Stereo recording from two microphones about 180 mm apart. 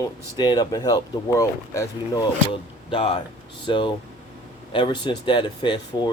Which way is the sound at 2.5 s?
30° left (ahead or behind).